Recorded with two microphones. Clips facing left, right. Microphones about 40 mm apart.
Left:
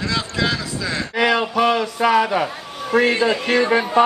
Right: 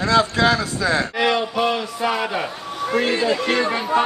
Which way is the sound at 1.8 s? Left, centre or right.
Left.